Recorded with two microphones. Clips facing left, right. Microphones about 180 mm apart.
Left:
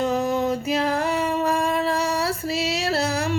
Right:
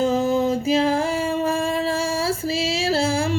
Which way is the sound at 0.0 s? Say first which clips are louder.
Right 3 dB; 30° right (ahead or behind).